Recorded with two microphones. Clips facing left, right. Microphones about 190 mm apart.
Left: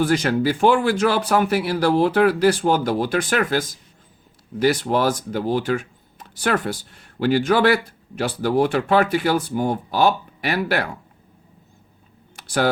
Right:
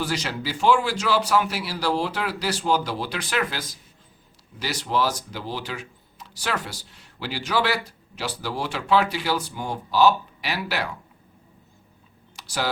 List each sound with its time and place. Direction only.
0.0 s speech: 55° left (ahead or behind)
12.4 s computer keyboard: 55° left (ahead or behind)